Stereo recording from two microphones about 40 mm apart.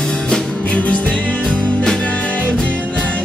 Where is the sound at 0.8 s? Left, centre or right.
Left.